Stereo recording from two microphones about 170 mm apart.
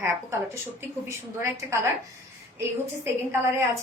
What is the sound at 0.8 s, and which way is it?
A woman's voice, 15° right (ahead or behind).